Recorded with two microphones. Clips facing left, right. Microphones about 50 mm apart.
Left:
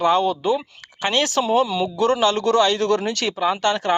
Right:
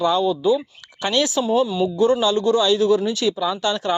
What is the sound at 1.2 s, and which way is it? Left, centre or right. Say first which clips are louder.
Speech: left 1 dB; left.